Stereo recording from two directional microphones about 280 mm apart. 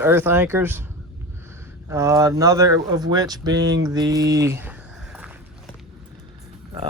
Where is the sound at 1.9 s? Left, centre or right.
Centre.